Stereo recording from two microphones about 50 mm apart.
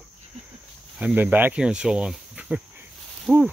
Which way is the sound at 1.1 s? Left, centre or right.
Right.